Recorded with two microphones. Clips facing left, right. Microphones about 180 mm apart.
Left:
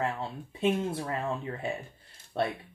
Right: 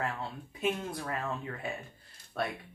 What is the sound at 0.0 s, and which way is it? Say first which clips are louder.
Speech: left 4 dB; 25° left (ahead or behind).